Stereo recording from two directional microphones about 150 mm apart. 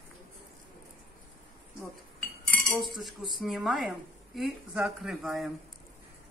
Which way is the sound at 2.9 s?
Centre (ahead or behind).